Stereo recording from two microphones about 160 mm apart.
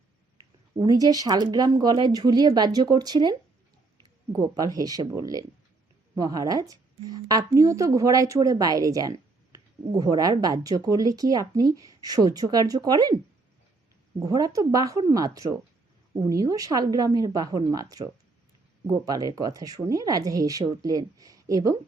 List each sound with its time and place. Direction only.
0.8 s a woman's voice: 25° right (ahead or behind)
14.2 s a woman's voice: 25° right (ahead or behind)